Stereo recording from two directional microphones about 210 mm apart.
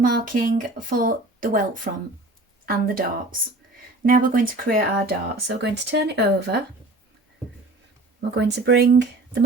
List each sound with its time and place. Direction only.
0.0 s speech: 45° right (ahead or behind)
4.0 s speech: 40° right (ahead or behind)
8.4 s speech: 55° right (ahead or behind)